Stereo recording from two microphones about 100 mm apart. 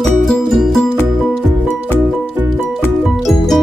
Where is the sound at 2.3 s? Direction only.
20° right (ahead or behind).